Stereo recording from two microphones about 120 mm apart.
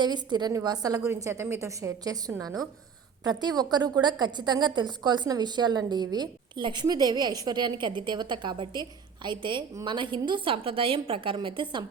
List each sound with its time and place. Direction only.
0.0 s a woman's voice: 40° right (ahead or behind)